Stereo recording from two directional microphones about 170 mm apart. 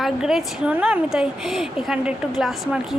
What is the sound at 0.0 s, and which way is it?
A woman's voice, 5° right (ahead or behind).